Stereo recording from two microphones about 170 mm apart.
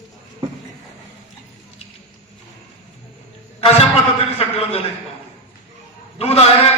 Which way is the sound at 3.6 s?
35° left (ahead or behind).